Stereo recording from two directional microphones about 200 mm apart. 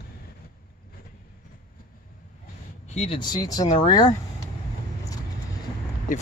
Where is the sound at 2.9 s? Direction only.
30° left (ahead or behind).